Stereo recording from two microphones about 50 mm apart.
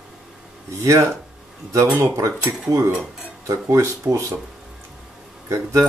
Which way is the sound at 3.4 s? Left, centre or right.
Right.